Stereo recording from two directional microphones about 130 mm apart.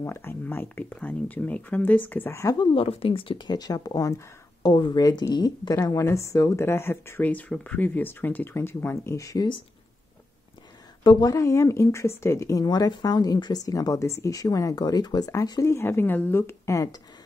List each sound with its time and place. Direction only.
0.0 s speech: 20° left (ahead or behind)
2.6 s speech: 45° left (ahead or behind); by 9.5 s 25° left (ahead or behind)
11.1 s speech: 30° left (ahead or behind)